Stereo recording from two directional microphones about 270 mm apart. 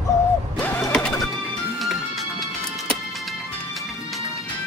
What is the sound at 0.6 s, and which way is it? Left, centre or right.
Vehicle, centre.